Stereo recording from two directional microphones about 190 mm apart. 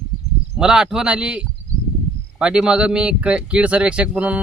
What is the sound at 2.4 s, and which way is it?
Speech, 5° right (ahead or behind).